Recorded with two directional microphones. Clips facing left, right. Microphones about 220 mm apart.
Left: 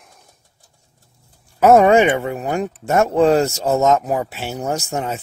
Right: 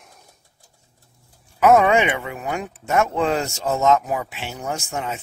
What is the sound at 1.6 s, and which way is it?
Speech, 40° left (ahead or behind).